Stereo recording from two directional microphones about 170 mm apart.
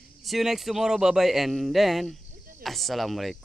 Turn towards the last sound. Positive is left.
turn(degrees=0)  # may be behind; listen again after turning